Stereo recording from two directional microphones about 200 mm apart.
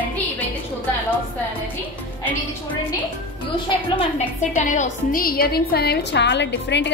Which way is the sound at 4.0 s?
35° left (ahead or behind).